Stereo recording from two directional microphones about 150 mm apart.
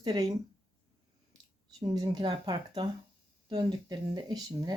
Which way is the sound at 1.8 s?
25° right (ahead or behind).